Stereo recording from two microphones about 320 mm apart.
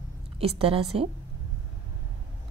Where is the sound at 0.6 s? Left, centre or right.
Centre.